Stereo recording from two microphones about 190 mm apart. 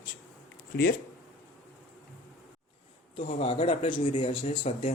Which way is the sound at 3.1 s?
30° left (ahead or behind).